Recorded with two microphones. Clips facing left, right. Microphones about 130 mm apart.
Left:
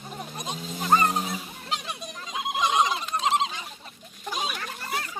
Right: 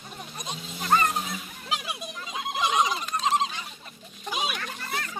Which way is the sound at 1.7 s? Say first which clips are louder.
Right 1 dB; 5° right (ahead or behind).